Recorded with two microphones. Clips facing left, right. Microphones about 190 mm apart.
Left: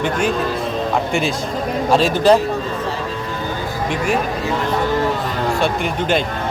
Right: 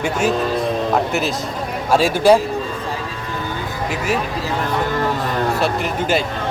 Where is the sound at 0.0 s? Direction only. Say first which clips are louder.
Even; 5° right (ahead or behind).